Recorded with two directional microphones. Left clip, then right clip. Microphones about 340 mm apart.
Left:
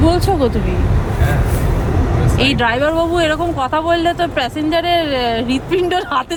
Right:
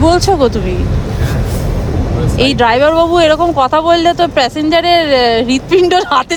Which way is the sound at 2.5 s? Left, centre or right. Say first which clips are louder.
Right 9 dB; centre.